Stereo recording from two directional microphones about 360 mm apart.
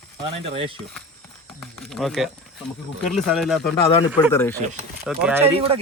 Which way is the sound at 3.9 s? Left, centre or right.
Centre.